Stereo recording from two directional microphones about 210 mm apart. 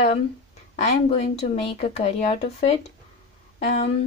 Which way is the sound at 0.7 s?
30° left (ahead or behind).